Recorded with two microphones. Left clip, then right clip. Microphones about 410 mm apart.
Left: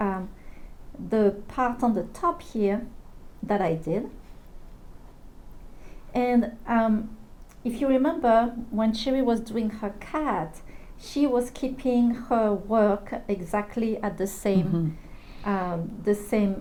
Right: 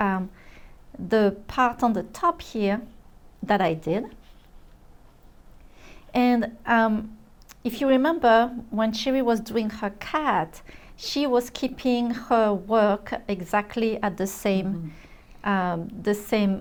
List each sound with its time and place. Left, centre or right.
1.1 s a woman's voice: right
5.8 s a woman's voice: right